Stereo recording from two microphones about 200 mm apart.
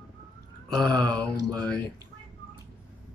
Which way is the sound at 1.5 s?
5° left (ahead or behind).